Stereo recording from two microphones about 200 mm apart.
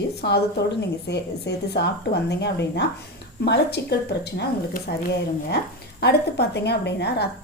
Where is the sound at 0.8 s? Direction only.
60° left (ahead or behind).